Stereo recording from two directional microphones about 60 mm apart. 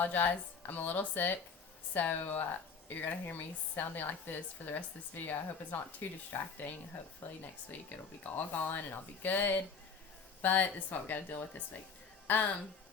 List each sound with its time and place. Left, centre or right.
0.0 s speech: left